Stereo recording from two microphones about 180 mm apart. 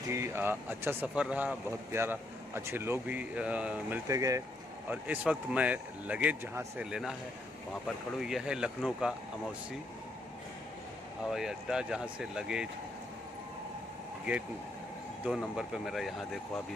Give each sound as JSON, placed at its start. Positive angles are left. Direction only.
{"t": 0.1, "sound": "speech", "side_deg": -15}
{"t": 4.1, "sound": "speech", "side_deg": -20}
{"t": 8.2, "sound": "speech", "side_deg": -5}
{"t": 11.2, "sound": "speech", "side_deg": 0}
{"t": 15.2, "sound": "speech", "side_deg": 0}